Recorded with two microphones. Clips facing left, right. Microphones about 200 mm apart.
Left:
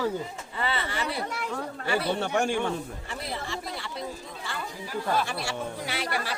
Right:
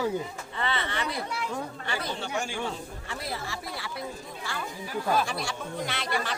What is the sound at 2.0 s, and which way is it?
Speech, 60° left (ahead or behind).